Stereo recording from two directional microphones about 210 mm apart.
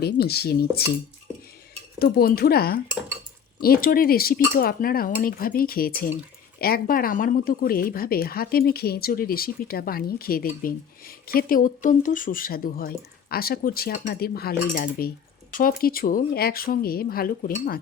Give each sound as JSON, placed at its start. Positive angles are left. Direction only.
{"t": 0.0, "sound": "speech", "side_deg": 50}
{"t": 2.0, "sound": "speech", "side_deg": 45}